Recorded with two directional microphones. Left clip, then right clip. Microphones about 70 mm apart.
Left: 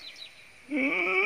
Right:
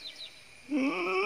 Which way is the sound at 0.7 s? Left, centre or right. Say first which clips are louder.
Left 4 dB; right.